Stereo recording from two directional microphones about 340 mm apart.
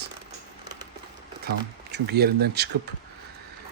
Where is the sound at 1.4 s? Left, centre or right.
Right.